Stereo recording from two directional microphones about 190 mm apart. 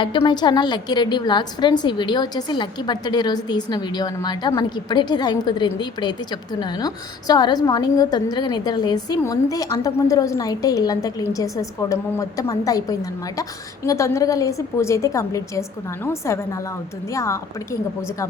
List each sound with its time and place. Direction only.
0.0 s a woman's voice: 25° left (ahead or behind)